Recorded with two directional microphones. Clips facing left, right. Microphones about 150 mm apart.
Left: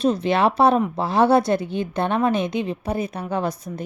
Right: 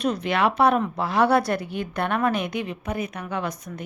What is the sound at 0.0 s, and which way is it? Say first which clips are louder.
A woman's voice: left 4 dB; 30° left (ahead or behind).